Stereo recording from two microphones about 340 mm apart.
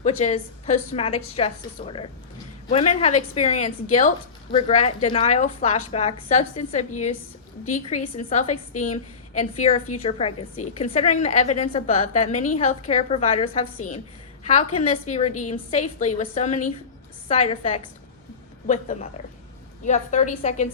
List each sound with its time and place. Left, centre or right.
0.0 s a woman's voice: centre